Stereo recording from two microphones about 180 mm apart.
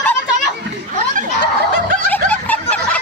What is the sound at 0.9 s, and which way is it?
Snicker, 45° right (ahead or behind).